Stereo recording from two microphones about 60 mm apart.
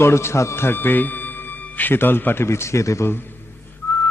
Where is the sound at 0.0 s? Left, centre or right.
Left.